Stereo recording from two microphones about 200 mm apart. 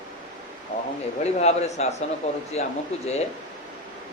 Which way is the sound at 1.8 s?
35° left (ahead or behind).